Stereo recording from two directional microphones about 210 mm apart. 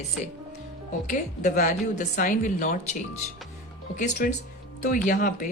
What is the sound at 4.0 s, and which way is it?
Speech, 35° left (ahead or behind).